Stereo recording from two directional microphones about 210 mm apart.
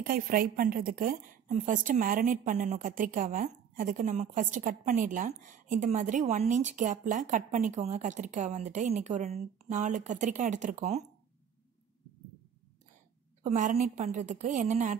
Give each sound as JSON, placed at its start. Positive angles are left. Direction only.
{"t": 0.0, "sound": "a woman's voice", "side_deg": -45}
{"t": 13.4, "sound": "a woman's voice", "side_deg": -35}